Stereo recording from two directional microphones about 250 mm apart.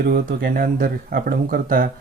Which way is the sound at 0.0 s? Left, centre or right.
Right.